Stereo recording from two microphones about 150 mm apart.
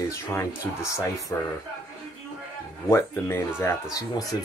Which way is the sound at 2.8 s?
15° left (ahead or behind).